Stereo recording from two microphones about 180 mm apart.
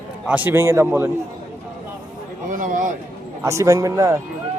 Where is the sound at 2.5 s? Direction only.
45° right (ahead or behind).